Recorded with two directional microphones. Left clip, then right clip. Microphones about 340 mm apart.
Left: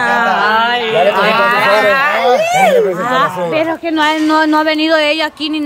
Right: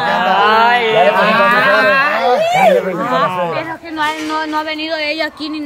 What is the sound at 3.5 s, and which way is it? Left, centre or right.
A man's voice, centre.